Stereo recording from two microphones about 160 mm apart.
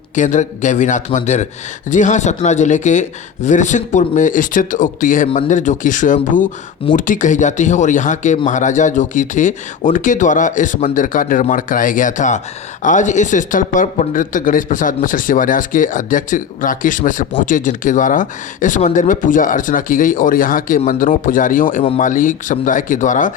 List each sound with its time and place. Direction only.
0.2 s a man's voice: 50° left (ahead or behind)